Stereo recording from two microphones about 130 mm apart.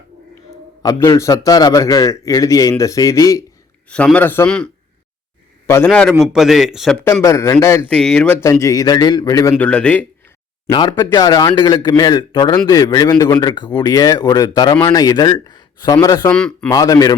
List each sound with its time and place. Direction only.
0.8 s a man's voice: 25° left (ahead or behind)
3.8 s speech: 10° left (ahead or behind)
5.8 s speech: 5° left (ahead or behind)
6.1 s a man's voice: 5° right (ahead or behind)
7.0 s a man's voice: 20° left (ahead or behind)
7.9 s speech: 5° left (ahead or behind)
8.4 s a man's voice: 25° left (ahead or behind)
9.6 s speech: 10° left (ahead or behind)
10.7 s speech: 30° left (ahead or behind)
16.3 s a man's voice: 5° left (ahead or behind)
16.6 s a man's voice: 25° left (ahead or behind)